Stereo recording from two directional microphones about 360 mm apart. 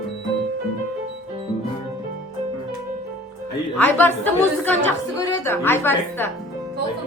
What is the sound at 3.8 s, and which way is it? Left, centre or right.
A woman's voice, centre.